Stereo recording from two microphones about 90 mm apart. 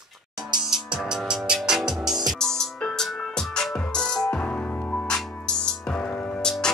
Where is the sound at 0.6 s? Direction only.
5° right (ahead or behind).